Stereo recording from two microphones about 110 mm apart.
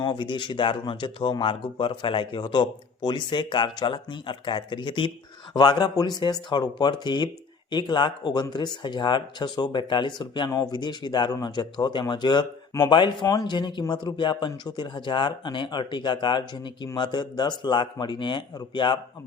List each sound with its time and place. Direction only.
0.0 s speech: 45° left (ahead or behind)